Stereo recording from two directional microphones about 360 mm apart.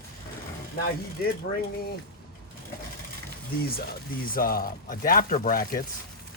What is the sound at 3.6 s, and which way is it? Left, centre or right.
Speech, left.